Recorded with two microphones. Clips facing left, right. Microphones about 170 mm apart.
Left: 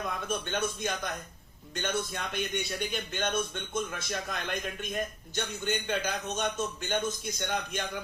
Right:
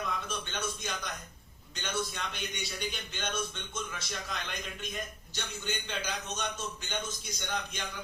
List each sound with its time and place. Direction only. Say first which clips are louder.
0.3 s a man's voice: left 6 dB; 50° left (ahead or behind)